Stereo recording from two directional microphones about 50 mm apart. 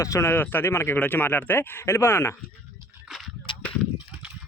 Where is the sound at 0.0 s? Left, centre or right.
Left.